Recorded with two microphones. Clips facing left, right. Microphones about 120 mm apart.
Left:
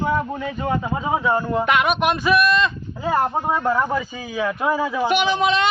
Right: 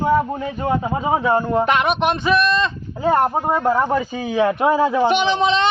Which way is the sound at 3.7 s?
20° right (ahead or behind).